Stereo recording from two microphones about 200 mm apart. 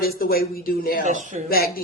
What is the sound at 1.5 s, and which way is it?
Speech, 50° left (ahead or behind).